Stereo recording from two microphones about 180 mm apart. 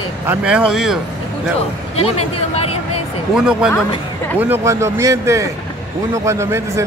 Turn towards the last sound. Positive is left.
turn(degrees=-15)  # may be behind; listen again after turning